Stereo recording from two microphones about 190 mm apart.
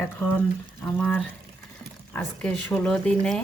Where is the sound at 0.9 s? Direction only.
5° left (ahead or behind).